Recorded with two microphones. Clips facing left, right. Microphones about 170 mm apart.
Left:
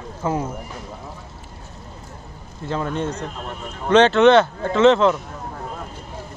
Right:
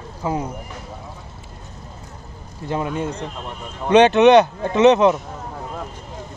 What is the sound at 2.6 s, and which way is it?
A man's voice, 15° right (ahead or behind).